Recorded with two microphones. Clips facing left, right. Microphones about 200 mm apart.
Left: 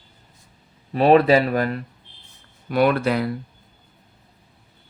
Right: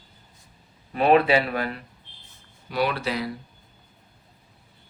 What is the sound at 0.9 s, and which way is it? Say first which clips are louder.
Speech: left 4 dB; 35° left (ahead or behind).